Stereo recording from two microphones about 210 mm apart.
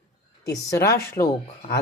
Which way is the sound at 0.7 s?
15° left (ahead or behind).